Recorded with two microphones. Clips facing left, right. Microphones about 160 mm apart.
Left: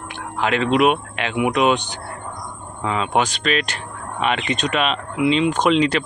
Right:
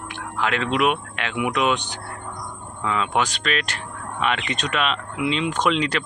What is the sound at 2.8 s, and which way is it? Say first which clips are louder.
Speech: left 3 dB; 20° left (ahead or behind).